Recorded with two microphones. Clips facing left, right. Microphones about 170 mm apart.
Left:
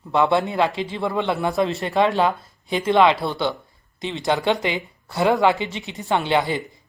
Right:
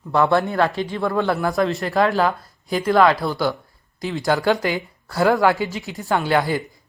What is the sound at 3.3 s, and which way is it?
Speech, 5° right (ahead or behind).